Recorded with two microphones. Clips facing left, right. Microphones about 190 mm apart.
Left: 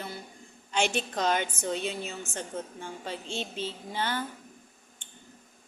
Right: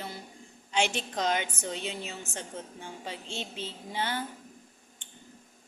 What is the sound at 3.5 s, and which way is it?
Speech, 15° right (ahead or behind).